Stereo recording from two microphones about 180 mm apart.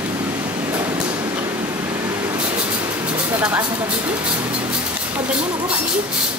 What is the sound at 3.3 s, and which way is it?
Speech, 10° right (ahead or behind).